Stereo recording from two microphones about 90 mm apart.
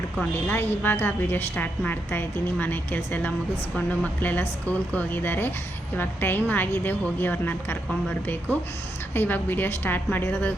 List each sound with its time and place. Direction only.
0.3 s a woman's voice: 25° left (ahead or behind)
9.1 s a woman's voice: 20° left (ahead or behind)